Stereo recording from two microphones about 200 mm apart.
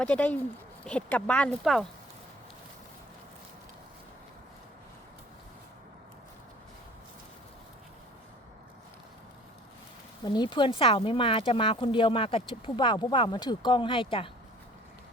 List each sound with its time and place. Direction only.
0.0 s speech: 5° left (ahead or behind)
10.2 s speech: 20° left (ahead or behind)